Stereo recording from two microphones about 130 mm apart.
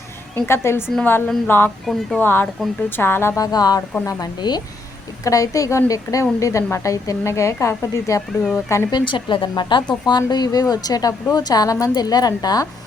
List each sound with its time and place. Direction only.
0.3 s a woman's voice: 20° left (ahead or behind)
1.9 s speech: centre (ahead or behind)
2.2 s a woman's voice: 15° left (ahead or behind)
8.9 s a woman's voice: 35° left (ahead or behind)